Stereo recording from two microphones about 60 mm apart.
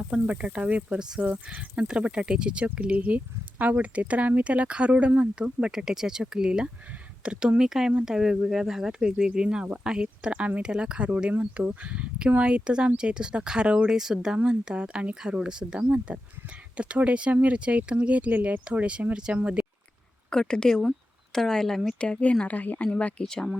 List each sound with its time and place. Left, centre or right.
0.1 s speech: centre
11.3 s speech: right
11.7 s speech: centre
20.3 s speech: centre
22.0 s a woman's voice: centre
23.2 s speech: centre